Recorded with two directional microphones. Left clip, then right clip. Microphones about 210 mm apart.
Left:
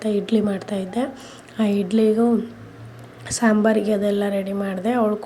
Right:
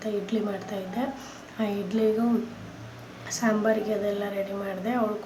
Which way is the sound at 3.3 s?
30° left (ahead or behind).